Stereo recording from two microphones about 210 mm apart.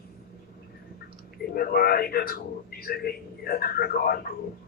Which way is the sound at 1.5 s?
45° left (ahead or behind).